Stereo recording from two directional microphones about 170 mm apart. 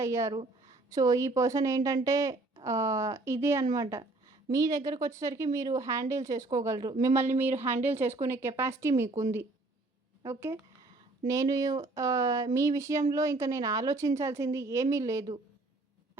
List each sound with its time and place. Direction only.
0.0 s a woman's voice: 15° right (ahead or behind)
10.2 s a woman's voice: 15° right (ahead or behind)